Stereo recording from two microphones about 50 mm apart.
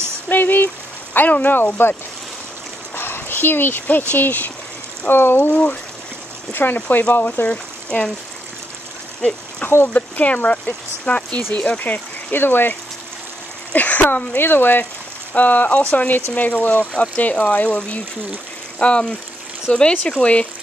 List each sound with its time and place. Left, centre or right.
0.3 s a sound: left
1.1 s speech: left
3.0 s dog: left
4.1 s speech: left
5.0 s speech: left
7.4 s speech: left
9.6 s speech: left
13.7 s speech: left
14.3 s speech: left
18.8 s speech: left